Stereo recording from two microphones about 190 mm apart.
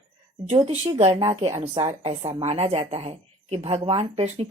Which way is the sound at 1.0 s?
30° right (ahead or behind).